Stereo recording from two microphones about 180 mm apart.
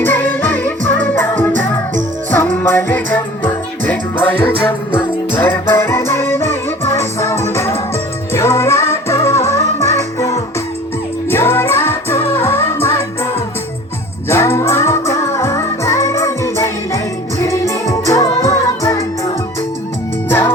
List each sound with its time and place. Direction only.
0.0 s music: 10° left (ahead or behind)
14.3 s music: 15° left (ahead or behind)